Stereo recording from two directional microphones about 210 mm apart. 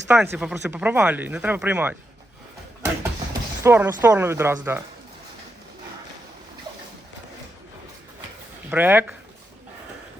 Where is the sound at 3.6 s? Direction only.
10° right (ahead or behind).